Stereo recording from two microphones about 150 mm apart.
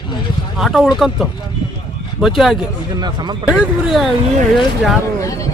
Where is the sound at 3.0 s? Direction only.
30° right (ahead or behind).